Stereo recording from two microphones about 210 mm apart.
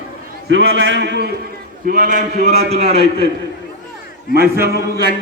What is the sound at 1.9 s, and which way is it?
A man's voice, 40° right (ahead or behind).